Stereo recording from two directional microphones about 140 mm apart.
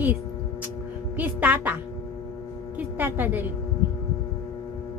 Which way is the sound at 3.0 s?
15° right (ahead or behind).